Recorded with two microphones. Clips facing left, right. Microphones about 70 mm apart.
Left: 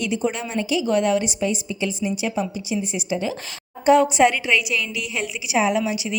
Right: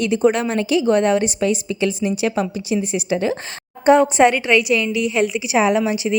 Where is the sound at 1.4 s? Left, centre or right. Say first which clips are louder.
Right 5 dB; right.